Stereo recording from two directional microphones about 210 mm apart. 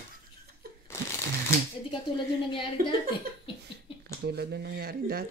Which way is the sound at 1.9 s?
25° left (ahead or behind).